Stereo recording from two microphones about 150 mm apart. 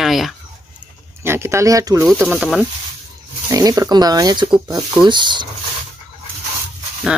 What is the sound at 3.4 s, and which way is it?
Speech, 25° right (ahead or behind).